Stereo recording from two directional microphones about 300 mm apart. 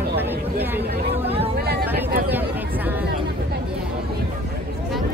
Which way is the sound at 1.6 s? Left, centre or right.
Right.